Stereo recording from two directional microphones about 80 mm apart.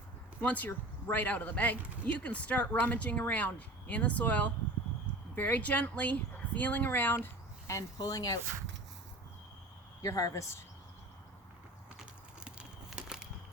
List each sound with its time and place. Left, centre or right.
0.4 s speech: left
7.9 s speech: left
10.0 s speech: left
12.5 s crumpling: centre